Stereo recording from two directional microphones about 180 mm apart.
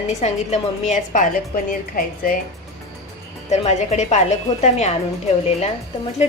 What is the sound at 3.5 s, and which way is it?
A woman's voice, 40° left (ahead or behind).